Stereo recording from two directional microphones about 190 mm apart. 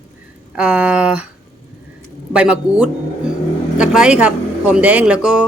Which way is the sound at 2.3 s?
5° right (ahead or behind).